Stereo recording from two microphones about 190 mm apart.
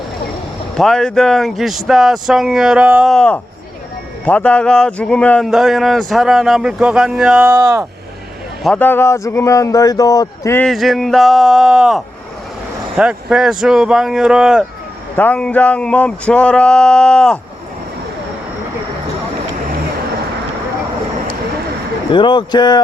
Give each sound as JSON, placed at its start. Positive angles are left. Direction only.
{"t": 0.8, "sound": "speech", "side_deg": 5}
{"t": 8.6, "sound": "speech", "side_deg": 5}
{"t": 10.7, "sound": "speech", "side_deg": 0}
{"t": 15.1, "sound": "speech", "side_deg": 10}
{"t": 22.1, "sound": "speech", "side_deg": 25}